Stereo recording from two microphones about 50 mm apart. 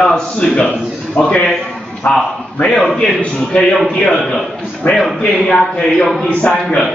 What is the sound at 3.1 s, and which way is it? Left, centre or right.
A man's voice, centre.